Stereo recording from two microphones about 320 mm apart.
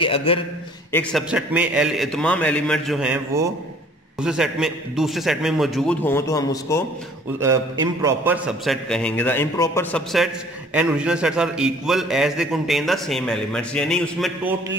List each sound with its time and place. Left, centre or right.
0.0 s a man's voice: centre
0.9 s a man's voice: centre
7.3 s a man's voice: centre